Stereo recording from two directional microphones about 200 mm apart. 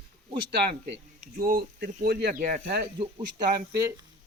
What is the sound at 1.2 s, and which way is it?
Speech, 45° right (ahead or behind).